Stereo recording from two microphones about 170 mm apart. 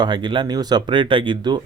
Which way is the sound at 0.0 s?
25° right (ahead or behind).